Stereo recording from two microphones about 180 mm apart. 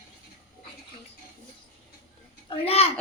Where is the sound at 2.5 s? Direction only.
35° left (ahead or behind).